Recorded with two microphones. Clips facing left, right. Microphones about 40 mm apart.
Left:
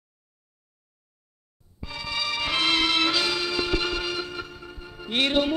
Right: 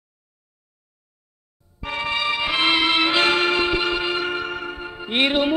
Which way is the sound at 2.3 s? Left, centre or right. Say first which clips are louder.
Right 3 dB; right.